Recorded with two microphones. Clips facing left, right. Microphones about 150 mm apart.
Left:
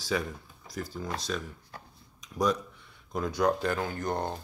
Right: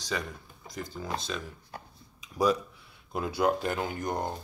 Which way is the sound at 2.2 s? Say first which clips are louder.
Right 2 dB; 5° right (ahead or behind).